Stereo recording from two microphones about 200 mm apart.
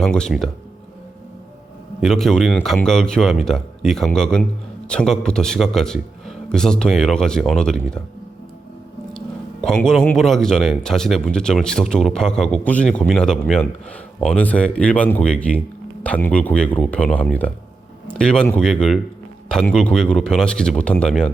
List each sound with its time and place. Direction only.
0.0 s speech: 5° left (ahead or behind)
2.0 s speech: centre (ahead or behind)
9.1 s speech: 5° left (ahead or behind)